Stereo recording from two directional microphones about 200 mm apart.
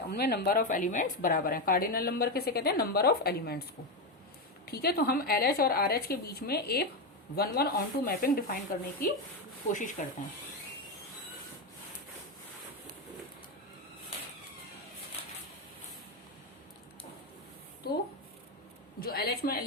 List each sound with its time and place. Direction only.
0.1 s a woman's voice: 55° left (ahead or behind)
4.6 s a woman's voice: 50° left (ahead or behind)
17.8 s a woman's voice: 50° left (ahead or behind)